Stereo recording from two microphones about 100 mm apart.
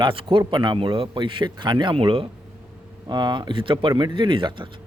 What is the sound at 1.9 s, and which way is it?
Speech, 65° right (ahead or behind).